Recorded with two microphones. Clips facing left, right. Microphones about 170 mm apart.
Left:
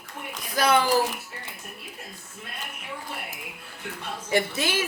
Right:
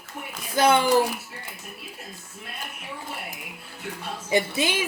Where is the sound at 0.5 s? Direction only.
25° right (ahead or behind).